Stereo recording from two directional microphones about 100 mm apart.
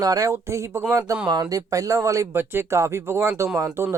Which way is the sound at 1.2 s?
45° right (ahead or behind).